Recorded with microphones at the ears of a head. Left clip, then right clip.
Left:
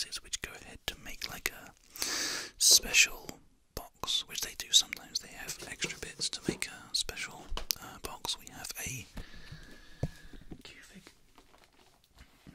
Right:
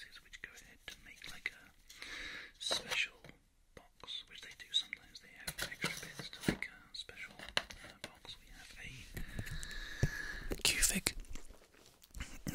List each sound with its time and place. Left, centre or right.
0.0 s whispering: left
9.4 s whispering: right